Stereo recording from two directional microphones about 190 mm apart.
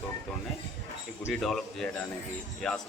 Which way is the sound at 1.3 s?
Centre (ahead or behind).